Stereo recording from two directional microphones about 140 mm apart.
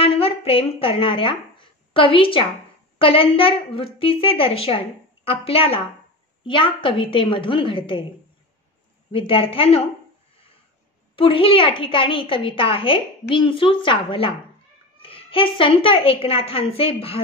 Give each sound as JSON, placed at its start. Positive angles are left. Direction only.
{"t": 0.0, "sound": "a woman's voice", "side_deg": 45}
{"t": 9.1, "sound": "a woman's voice", "side_deg": 40}
{"t": 11.1, "sound": "a woman's voice", "side_deg": 40}